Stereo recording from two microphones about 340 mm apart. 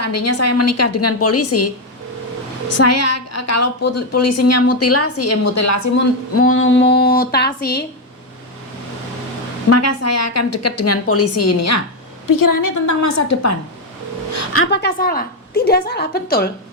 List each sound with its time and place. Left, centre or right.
0.0 s a woman's voice: left
2.7 s a woman's voice: left
6.3 s a woman's voice: left
9.6 s a woman's voice: left
12.3 s a woman's voice: left
14.3 s a woman's voice: left